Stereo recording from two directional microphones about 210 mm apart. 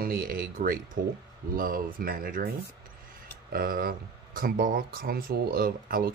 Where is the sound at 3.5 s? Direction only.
45° right (ahead or behind).